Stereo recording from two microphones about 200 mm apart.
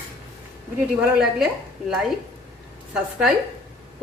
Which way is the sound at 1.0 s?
5° right (ahead or behind).